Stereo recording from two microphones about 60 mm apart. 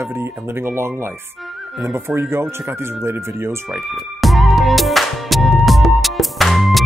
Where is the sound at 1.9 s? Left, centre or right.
Right.